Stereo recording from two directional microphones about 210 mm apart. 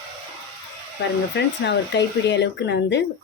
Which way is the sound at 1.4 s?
55° left (ahead or behind).